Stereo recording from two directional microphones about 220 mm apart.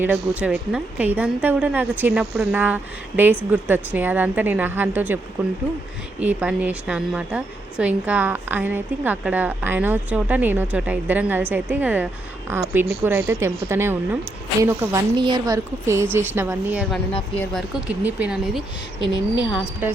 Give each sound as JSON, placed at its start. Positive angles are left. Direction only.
{"t": 0.0, "sound": "a woman's voice", "side_deg": -10}
{"t": 17.3, "sound": "speech", "side_deg": 10}
{"t": 17.7, "sound": "speech", "side_deg": -5}
{"t": 18.9, "sound": "a woman's voice", "side_deg": -25}